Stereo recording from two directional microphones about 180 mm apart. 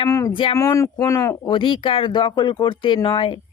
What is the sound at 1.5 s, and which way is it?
Speech, 25° left (ahead or behind).